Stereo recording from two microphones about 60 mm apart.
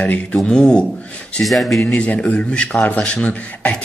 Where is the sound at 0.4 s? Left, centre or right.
Centre.